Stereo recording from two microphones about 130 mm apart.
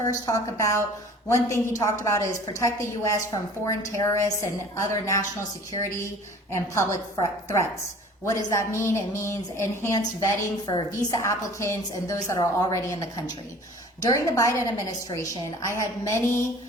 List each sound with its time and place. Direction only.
0.0 s a woman's voice: 25° left (ahead or behind)